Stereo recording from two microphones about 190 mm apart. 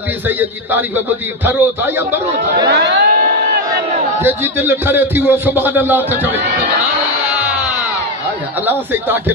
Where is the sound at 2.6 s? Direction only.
65° right (ahead or behind).